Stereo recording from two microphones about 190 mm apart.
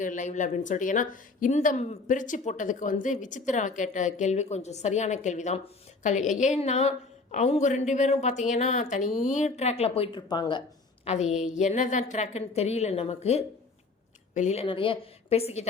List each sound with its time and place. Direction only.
0.0 s speech: 40° left (ahead or behind); by 10.6 s 20° left (ahead or behind)
11.0 s speech: 35° left (ahead or behind)